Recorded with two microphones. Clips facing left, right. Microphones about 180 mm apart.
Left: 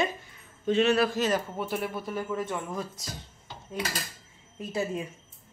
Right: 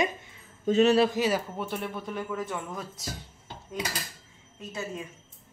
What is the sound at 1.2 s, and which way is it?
Speech, 5° right (ahead or behind).